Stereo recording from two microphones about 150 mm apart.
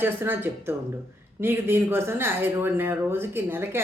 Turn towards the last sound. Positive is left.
turn(degrees=-15)  # may be behind; listen again after turning